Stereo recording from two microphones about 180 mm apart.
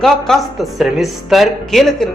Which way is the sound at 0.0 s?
Centre (ahead or behind).